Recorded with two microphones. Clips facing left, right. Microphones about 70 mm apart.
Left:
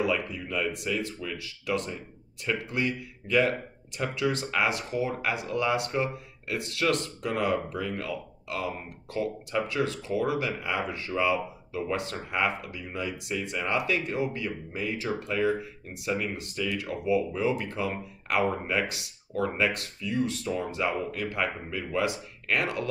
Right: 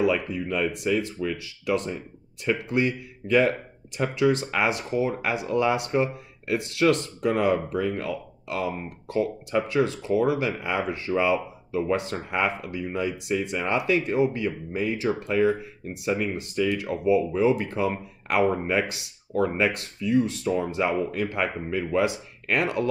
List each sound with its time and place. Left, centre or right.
0.3 s speech: right